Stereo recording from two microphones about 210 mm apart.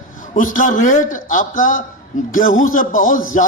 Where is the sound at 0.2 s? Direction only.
40° left (ahead or behind).